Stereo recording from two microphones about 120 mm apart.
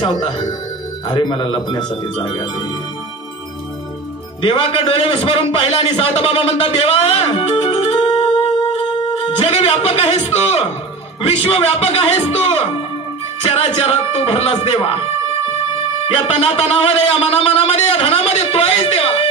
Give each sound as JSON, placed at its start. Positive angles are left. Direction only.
{"t": 0.0, "sound": "speech", "side_deg": 45}
{"t": 4.4, "sound": "a man's voice", "side_deg": 50}
{"t": 16.1, "sound": "speech", "side_deg": 50}